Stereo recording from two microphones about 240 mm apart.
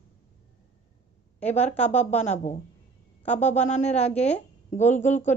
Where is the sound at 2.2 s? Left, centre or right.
Left.